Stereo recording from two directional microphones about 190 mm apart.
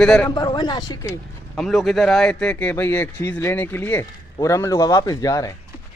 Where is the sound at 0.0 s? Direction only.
5° left (ahead or behind).